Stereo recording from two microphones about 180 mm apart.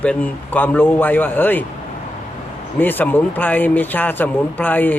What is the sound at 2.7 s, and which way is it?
Speech, 10° left (ahead or behind).